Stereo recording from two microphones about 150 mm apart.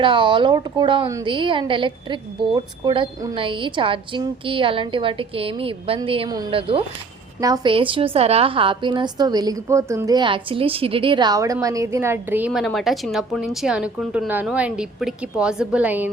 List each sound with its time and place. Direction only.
0.0 s a woman's voice: 35° right (ahead or behind)
7.4 s a woman's voice: 30° right (ahead or behind); by 16.0 s 10° right (ahead or behind)